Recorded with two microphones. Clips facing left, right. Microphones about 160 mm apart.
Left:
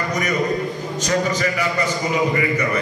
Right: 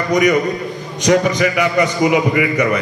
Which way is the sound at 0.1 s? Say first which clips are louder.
Right 8 dB; 70° right (ahead or behind).